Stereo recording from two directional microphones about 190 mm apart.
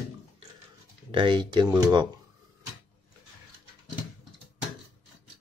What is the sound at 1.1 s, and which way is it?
Speech, 25° right (ahead or behind).